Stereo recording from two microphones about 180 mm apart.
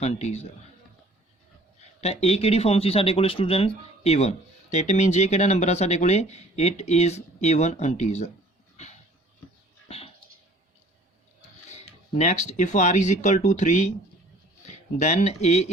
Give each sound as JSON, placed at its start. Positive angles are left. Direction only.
{"t": 0.0, "sound": "speech", "side_deg": 35}
{"t": 2.0, "sound": "speech", "side_deg": 35}
{"t": 12.1, "sound": "speech", "side_deg": 40}
{"t": 14.9, "sound": "speech", "side_deg": 40}